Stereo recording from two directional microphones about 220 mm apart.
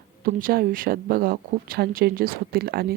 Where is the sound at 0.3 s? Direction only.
40° right (ahead or behind).